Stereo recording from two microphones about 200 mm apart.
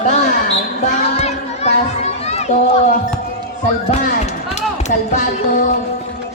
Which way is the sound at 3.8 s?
40° left (ahead or behind).